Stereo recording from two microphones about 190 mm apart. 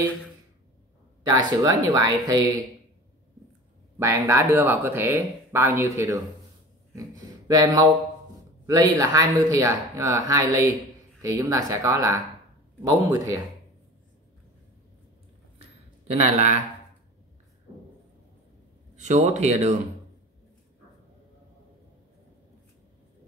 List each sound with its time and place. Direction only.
1.2 s speech: 20° right (ahead or behind)
4.0 s speech: 15° right (ahead or behind)
16.1 s a man's voice: 35° right (ahead or behind)
18.9 s a man's voice: 40° right (ahead or behind)